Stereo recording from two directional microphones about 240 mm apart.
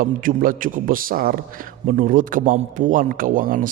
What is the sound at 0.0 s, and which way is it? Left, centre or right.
A man's voice, right.